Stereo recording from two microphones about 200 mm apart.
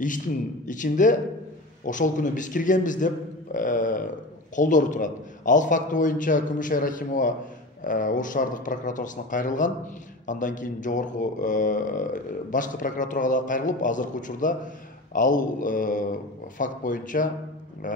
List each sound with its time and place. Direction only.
0.7 s a man's voice: 40° left (ahead or behind)